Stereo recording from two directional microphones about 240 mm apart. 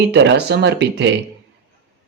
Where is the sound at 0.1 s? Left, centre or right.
Right.